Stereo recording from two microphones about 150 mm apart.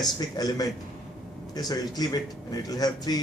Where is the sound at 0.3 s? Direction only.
25° left (ahead or behind).